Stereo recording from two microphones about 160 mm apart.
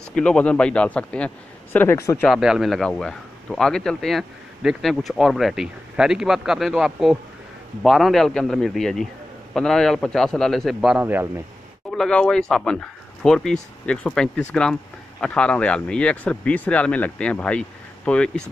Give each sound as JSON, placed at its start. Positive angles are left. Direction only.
{"t": 0.1, "sound": "speech", "side_deg": 5}
{"t": 2.2, "sound": "speech", "side_deg": 0}
{"t": 11.9, "sound": "speech", "side_deg": 5}